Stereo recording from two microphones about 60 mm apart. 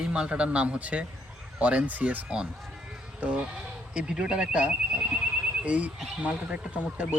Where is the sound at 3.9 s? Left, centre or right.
Centre.